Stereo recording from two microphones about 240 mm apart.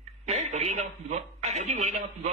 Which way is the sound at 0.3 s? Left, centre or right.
Right.